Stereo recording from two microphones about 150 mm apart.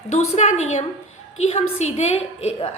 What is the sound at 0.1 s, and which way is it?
A woman's voice, 50° left (ahead or behind).